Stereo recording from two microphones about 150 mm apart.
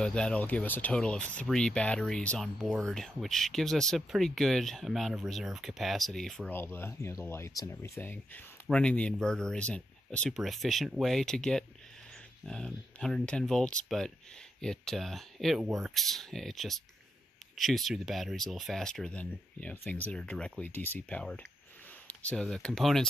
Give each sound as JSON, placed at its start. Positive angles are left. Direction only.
{"t": 0.0, "sound": "speech", "side_deg": 5}
{"t": 6.5, "sound": "speech", "side_deg": 15}